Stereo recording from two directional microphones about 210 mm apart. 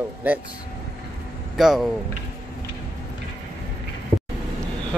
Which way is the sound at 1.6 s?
Centre (ahead or behind).